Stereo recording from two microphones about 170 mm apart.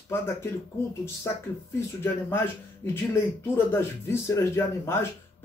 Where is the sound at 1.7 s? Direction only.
15° left (ahead or behind).